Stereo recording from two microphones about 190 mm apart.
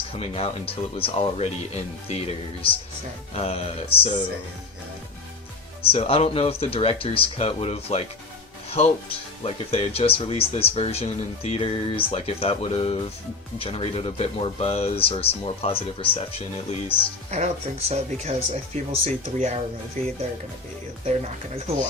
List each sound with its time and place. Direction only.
0.2 s speech: 30° left (ahead or behind)
5.9 s speech: 30° left (ahead or behind)
17.3 s speech: 35° right (ahead or behind)